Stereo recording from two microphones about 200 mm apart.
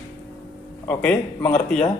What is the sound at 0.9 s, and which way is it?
Speech, 5° left (ahead or behind).